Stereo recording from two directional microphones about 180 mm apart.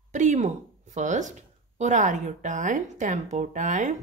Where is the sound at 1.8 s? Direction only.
40° right (ahead or behind).